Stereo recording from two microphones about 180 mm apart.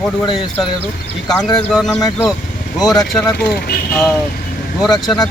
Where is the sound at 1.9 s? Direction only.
20° left (ahead or behind).